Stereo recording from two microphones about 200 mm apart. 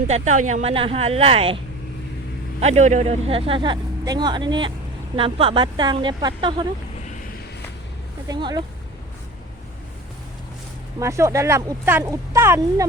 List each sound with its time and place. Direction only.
0.1 s speech: 35° right (ahead or behind); by 6.7 s 20° right (ahead or behind)
8.3 s speech: 20° right (ahead or behind)
11.0 s speech: 15° right (ahead or behind)